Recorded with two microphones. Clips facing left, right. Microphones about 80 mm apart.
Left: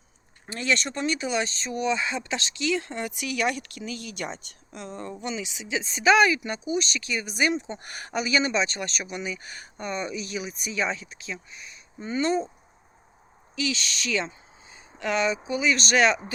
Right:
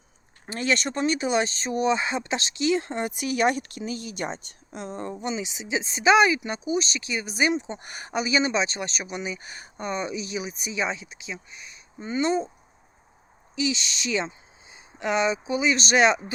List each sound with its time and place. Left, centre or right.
0.7 s speech: centre
13.6 s speech: right